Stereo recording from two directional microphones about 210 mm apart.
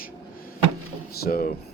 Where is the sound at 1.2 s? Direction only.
45° left (ahead or behind).